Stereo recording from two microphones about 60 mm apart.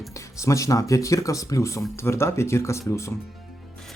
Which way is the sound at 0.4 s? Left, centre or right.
Left.